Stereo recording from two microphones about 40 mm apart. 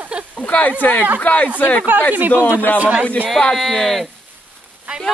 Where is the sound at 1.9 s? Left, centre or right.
Right.